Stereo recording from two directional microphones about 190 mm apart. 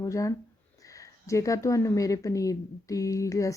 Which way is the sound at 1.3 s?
15° left (ahead or behind).